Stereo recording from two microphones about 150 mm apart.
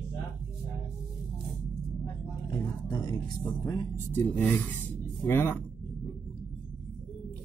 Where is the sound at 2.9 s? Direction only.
25° left (ahead or behind).